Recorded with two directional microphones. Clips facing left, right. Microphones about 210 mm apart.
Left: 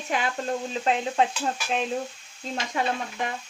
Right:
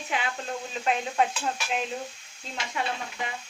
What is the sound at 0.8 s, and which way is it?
Speech, 30° left (ahead or behind).